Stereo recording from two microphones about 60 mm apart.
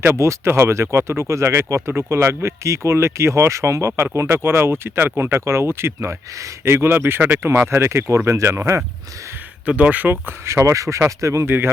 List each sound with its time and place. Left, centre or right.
0.0 s speech: right
9.6 s speech: right